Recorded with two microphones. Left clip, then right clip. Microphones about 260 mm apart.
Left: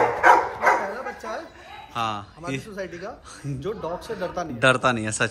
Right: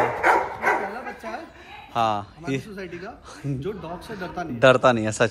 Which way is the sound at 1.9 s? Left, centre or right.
Centre.